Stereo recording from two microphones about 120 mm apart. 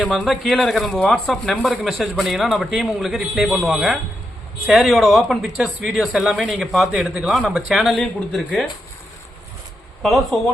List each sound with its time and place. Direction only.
0.0 s speech: centre (ahead or behind)
10.0 s speech: centre (ahead or behind)